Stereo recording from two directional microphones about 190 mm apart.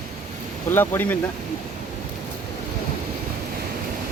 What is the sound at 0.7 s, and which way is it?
Speech, 10° left (ahead or behind).